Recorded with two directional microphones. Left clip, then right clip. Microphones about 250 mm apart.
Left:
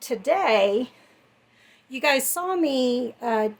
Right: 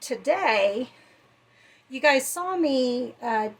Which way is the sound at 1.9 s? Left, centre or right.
Left.